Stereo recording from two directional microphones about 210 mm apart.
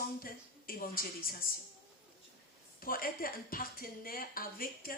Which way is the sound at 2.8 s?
45° left (ahead or behind).